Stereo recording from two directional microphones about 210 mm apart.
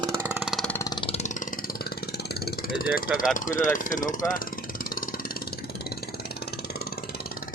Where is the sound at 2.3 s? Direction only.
45° left (ahead or behind).